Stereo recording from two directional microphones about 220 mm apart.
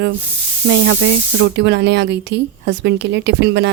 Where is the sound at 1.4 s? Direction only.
50° right (ahead or behind).